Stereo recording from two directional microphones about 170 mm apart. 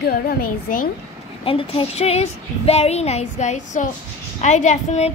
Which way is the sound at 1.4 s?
35° left (ahead or behind).